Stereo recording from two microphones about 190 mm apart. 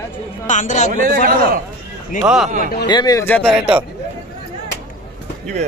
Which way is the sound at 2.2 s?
5° right (ahead or behind).